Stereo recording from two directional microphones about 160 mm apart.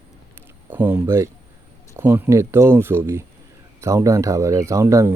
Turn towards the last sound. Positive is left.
turn(degrees=-20)  # may be behind; listen again after turning